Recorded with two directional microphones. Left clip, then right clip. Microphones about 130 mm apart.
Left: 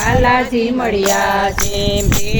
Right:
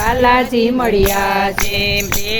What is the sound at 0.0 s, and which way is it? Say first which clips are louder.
Speech: right 1 dB; 40° right (ahead or behind).